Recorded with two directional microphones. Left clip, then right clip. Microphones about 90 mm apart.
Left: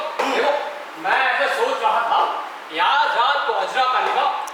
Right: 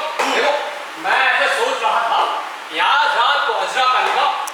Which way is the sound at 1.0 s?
25° left (ahead or behind).